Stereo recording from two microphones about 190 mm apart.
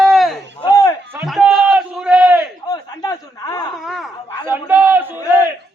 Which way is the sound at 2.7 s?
20° left (ahead or behind).